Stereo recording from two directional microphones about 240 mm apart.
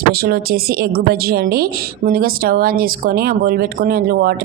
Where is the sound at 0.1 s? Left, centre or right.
Right.